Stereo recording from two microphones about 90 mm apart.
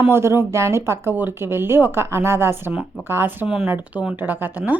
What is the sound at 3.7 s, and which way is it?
Speech, 20° right (ahead or behind).